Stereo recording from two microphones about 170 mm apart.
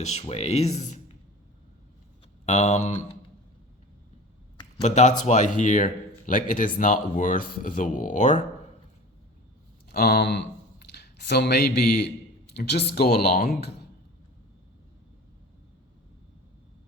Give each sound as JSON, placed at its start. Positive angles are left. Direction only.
{"t": 0.0, "sound": "speech", "side_deg": 40}
{"t": 2.5, "sound": "speech", "side_deg": 40}
{"t": 4.8, "sound": "speech", "side_deg": 40}
{"t": 9.9, "sound": "speech", "side_deg": 65}